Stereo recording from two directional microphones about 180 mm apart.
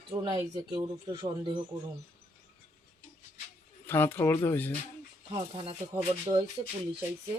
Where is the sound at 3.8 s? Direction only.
10° left (ahead or behind).